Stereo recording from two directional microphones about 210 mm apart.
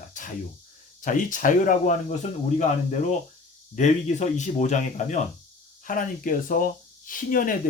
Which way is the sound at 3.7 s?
35° left (ahead or behind).